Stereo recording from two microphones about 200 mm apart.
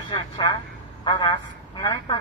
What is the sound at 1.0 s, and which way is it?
Telephone, 20° left (ahead or behind).